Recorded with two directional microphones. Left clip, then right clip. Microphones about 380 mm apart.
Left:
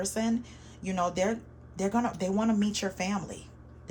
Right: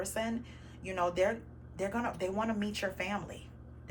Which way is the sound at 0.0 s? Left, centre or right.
Centre.